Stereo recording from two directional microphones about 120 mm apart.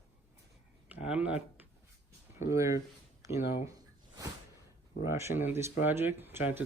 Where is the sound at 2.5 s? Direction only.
25° right (ahead or behind).